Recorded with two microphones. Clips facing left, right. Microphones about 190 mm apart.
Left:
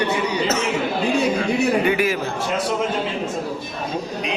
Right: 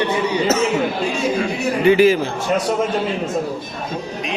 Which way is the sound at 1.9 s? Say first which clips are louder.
Right 8 dB; 25° right (ahead or behind).